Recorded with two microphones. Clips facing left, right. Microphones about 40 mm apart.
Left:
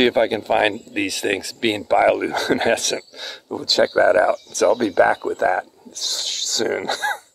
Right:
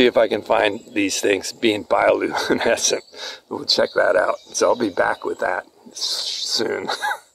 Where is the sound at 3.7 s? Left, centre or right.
Left.